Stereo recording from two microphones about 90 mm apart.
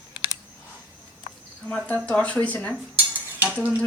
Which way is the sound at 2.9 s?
20° right (ahead or behind).